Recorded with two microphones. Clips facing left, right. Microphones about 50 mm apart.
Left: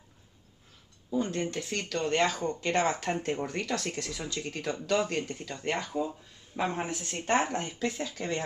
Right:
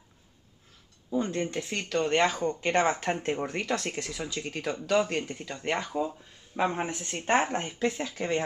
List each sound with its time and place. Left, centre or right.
1.1 s speech: right